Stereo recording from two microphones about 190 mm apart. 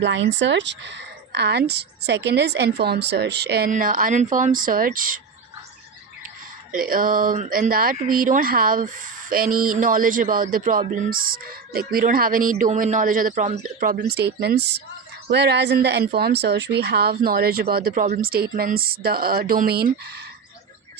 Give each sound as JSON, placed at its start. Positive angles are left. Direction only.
{"t": 0.0, "sound": "speech", "side_deg": -70}
{"t": 3.7, "sound": "speech", "side_deg": -45}
{"t": 6.7, "sound": "speech", "side_deg": -45}
{"t": 14.1, "sound": "speech", "side_deg": -60}